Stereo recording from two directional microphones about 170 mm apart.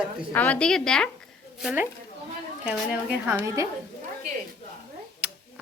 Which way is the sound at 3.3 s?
15° right (ahead or behind).